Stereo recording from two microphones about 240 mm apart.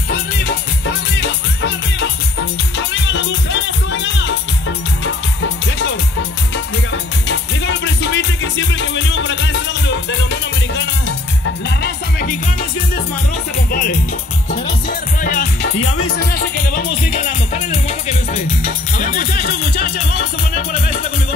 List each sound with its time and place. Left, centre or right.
0.1 s music: left
13.7 s music: left
15.8 s music: left
16.2 s music: left
17.8 s music: left
18.6 s music: left